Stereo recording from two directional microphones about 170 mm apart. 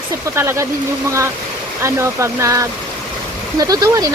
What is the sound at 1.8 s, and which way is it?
Speech, 15° right (ahead or behind).